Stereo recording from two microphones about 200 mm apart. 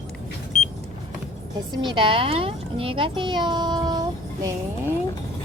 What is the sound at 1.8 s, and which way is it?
A child's voice, 25° right (ahead or behind).